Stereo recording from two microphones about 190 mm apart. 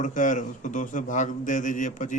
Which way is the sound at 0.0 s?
40° left (ahead or behind).